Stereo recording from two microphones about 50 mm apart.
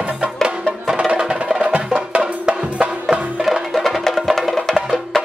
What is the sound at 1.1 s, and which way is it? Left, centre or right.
Music, centre.